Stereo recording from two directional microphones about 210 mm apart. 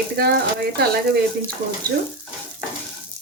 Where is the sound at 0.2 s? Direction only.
50° right (ahead or behind).